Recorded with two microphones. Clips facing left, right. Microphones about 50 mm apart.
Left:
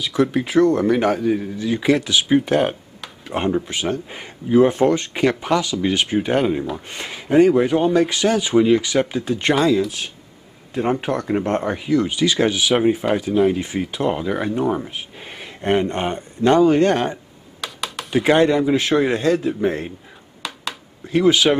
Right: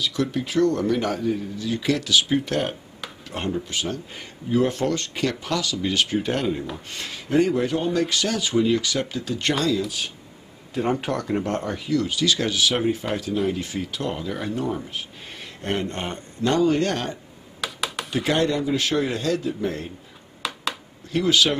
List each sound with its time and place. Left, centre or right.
0.0 s speech: centre
17.6 s computer keyboard: centre
18.1 s speech: left
20.4 s a sound: centre
21.1 s speech: left